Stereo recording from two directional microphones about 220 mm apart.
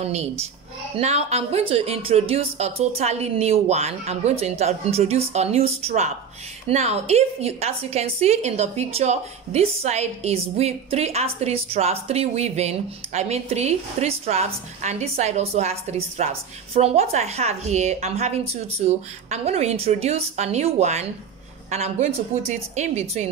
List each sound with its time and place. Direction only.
0.0 s a woman's voice: 30° right (ahead or behind)